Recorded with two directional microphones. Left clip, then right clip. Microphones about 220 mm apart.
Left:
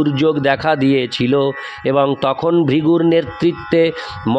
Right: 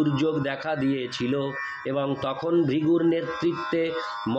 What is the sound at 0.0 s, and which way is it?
A man's voice, 45° left (ahead or behind).